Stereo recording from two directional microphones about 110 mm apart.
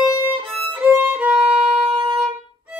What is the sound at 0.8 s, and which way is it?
Violin, 15° right (ahead or behind).